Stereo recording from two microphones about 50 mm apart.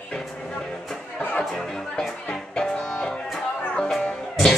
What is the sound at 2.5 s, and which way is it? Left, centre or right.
Music, centre.